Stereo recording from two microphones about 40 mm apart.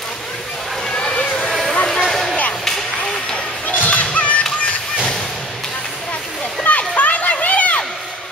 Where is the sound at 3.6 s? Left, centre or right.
Left.